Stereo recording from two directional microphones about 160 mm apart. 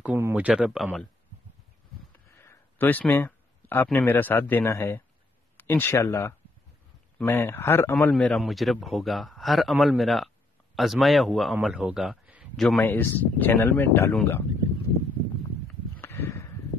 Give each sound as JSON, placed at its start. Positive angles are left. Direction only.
{"t": 0.0, "sound": "speech", "side_deg": -10}
{"t": 2.3, "sound": "a man's voice", "side_deg": 15}
{"t": 16.0, "sound": "a sound", "side_deg": 15}